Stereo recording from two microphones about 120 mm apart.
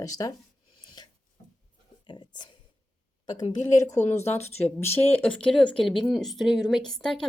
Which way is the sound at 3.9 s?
70° left (ahead or behind).